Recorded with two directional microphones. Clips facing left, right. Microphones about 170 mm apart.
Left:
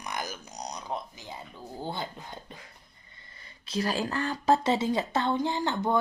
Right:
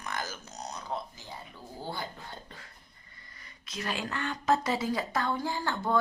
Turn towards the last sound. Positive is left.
turn(degrees=20)  # may be behind; listen again after turning